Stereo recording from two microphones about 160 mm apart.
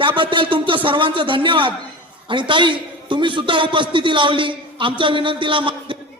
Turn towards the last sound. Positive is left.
turn(degrees=-30)  # may be behind; listen again after turning